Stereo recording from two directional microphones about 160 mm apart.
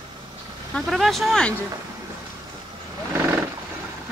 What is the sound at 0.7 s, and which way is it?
Vehicle, centre (ahead or behind).